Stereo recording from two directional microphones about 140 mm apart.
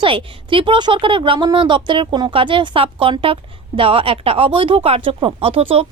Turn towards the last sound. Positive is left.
turn(degrees=-45)  # may be behind; listen again after turning